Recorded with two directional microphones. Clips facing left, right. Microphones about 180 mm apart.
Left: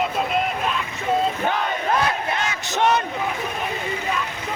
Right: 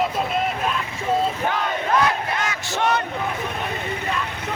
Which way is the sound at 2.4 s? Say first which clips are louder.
Left 2 dB; 25° left (ahead or behind).